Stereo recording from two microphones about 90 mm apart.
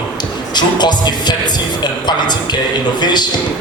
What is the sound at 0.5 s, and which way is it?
Music, 55° left (ahead or behind).